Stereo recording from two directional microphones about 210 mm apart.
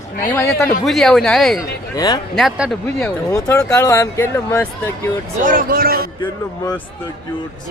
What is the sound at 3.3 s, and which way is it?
Speech, 15° left (ahead or behind).